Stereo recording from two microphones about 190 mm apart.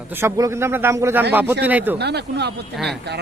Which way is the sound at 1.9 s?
60° right (ahead or behind).